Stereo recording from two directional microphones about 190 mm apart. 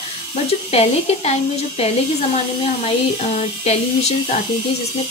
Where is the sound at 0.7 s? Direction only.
35° left (ahead or behind).